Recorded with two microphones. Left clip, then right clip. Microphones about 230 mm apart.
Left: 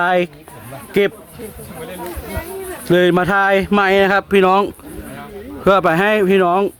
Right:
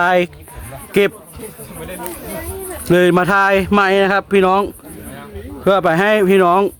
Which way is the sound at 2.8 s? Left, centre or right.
Centre.